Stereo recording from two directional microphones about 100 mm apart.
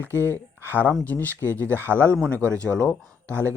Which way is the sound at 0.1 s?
25° right (ahead or behind).